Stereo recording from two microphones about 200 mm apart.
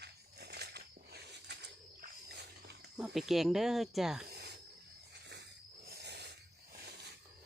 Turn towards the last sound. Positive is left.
turn(degrees=-55)  # may be behind; listen again after turning